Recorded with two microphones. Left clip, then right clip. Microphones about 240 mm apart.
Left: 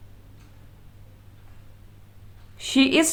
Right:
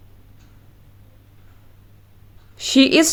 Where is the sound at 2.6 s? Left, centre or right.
Right.